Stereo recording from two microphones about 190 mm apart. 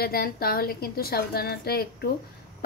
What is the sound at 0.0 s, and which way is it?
A woman's voice, 50° left (ahead or behind).